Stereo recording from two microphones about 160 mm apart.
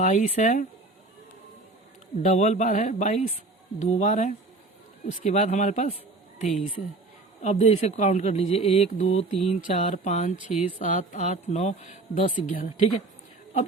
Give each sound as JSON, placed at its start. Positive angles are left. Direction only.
{"t": 0.0, "sound": "speech", "side_deg": 45}
{"t": 2.2, "sound": "speech", "side_deg": 55}